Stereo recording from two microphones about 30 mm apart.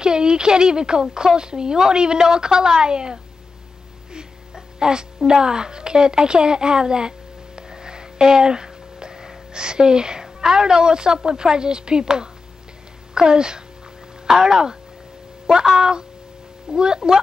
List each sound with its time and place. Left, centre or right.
0.0 s a woman's voice: right
4.1 s wail: right
9.5 s a woman's voice: right
14.2 s speech: centre
15.8 s a woman's voice: right